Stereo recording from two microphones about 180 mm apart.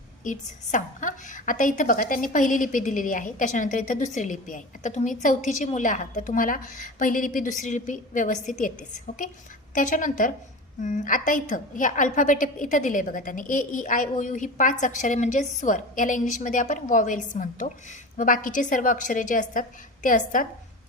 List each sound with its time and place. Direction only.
0.3 s a woman's voice: 45° left (ahead or behind)
9.7 s a woman's voice: 45° left (ahead or behind)